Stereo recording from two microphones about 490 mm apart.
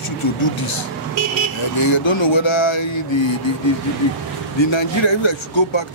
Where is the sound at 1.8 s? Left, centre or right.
Left.